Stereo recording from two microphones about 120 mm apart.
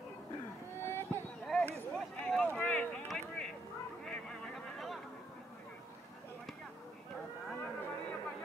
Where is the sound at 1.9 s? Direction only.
5° left (ahead or behind).